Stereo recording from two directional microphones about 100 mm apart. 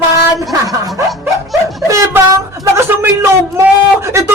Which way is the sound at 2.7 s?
25° right (ahead or behind).